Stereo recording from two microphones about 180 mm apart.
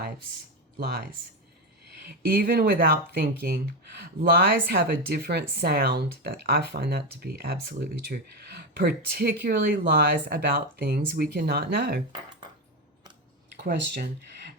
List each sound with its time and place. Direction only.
0.8 s speech: 65° right (ahead or behind)
4.7 s speech: 60° right (ahead or behind)
13.7 s speech: 65° right (ahead or behind)